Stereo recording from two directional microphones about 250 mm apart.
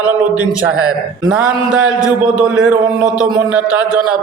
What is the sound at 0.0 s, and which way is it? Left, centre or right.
A man's voice, centre.